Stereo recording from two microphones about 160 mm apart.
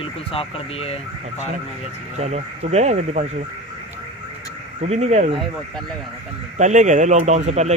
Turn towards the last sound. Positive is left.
turn(degrees=-45)  # may be behind; listen again after turning